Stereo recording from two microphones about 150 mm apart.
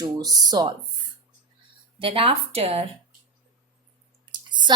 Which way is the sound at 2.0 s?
40° right (ahead or behind).